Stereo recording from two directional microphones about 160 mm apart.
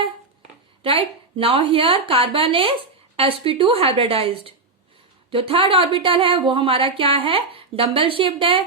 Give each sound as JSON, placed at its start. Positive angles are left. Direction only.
{"t": 0.8, "sound": "speech", "side_deg": -35}